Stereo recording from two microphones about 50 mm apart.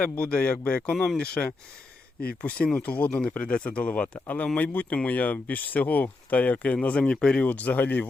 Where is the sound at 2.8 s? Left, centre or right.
Left.